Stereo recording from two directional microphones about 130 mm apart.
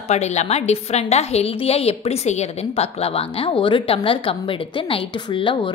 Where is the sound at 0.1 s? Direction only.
60° left (ahead or behind).